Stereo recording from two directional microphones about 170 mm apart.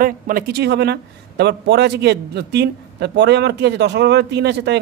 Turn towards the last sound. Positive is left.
turn(degrees=-85)